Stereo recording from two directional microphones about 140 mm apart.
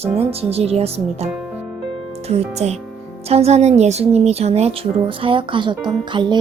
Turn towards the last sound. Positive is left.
turn(degrees=-35)  # may be behind; listen again after turning